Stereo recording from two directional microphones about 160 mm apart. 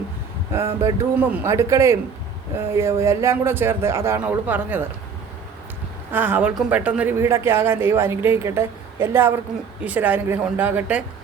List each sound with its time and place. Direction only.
0.5 s speech: 20° right (ahead or behind)
6.1 s speech: 10° right (ahead or behind)